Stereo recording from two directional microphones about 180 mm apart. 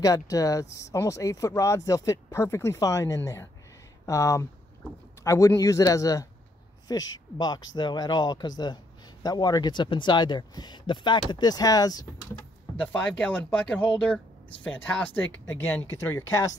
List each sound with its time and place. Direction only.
0.0 s speech: 20° left (ahead or behind)
12.8 s speech: 5° left (ahead or behind)